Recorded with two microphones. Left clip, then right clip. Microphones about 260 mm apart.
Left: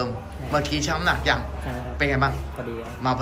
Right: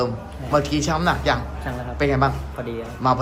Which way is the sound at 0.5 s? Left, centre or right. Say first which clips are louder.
Right 4 dB; centre.